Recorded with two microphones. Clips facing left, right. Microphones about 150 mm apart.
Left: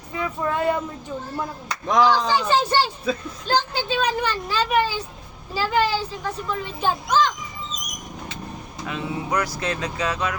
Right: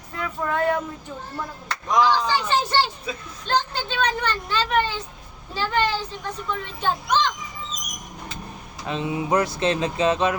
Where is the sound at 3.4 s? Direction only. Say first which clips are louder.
Left 2 dB; 5° left (ahead or behind).